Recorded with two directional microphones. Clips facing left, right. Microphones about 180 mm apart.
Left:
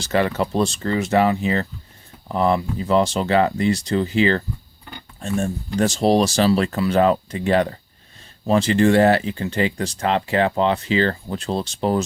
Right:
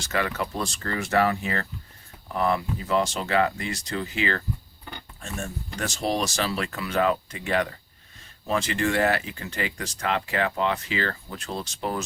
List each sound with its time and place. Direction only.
0.0 s speech: 30° left (ahead or behind)